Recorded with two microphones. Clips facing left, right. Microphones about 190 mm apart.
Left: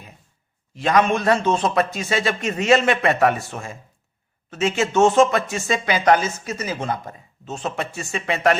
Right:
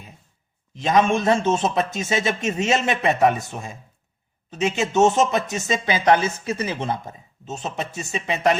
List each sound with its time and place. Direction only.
0.8 s speech: 20° right (ahead or behind)
7.4 s speech: 20° right (ahead or behind)